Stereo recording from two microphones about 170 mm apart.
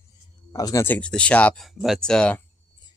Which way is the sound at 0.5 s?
20° left (ahead or behind).